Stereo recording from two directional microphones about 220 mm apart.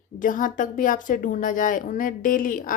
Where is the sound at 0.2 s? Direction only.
35° left (ahead or behind).